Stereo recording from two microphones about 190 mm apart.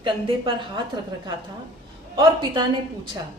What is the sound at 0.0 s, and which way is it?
Speech, 25° right (ahead or behind).